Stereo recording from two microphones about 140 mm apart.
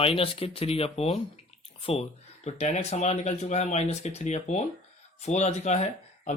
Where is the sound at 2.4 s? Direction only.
50° left (ahead or behind).